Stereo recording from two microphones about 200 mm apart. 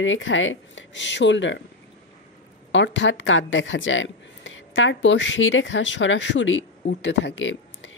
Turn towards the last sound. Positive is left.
turn(degrees=70)  # may be behind; listen again after turning